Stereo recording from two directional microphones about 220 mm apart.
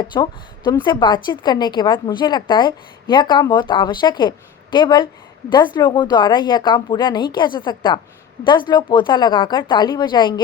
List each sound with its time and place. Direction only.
0.0 s a woman's voice: 20° left (ahead or behind)